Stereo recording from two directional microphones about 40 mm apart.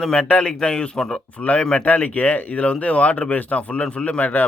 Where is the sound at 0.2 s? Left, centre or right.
Left.